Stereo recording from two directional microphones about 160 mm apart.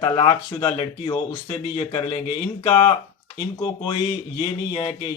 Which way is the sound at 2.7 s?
30° left (ahead or behind).